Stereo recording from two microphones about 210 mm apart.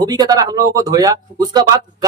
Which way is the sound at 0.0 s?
20° right (ahead or behind).